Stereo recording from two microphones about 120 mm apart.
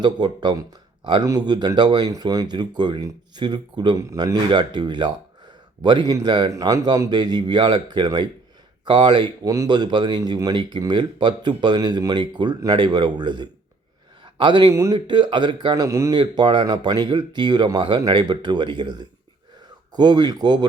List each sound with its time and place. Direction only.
0.0 s speech: 40° right (ahead or behind)
14.7 s speech: 25° right (ahead or behind)
14.9 s speech: 40° right (ahead or behind)
15.9 s speech: 25° right (ahead or behind)
16.1 s speech: 40° right (ahead or behind)